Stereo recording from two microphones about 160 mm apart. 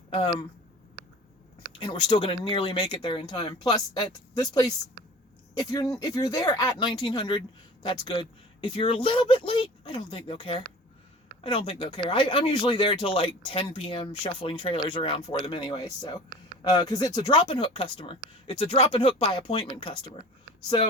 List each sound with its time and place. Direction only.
1.8 s speech: 35° left (ahead or behind)